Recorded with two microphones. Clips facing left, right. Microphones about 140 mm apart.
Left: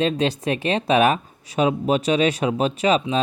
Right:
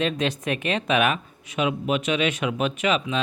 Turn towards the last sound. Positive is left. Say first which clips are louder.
# left 4 dB
turn(degrees=35)  # may be behind; listen again after turning